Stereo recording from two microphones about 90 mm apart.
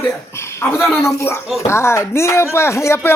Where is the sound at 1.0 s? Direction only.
30° left (ahead or behind).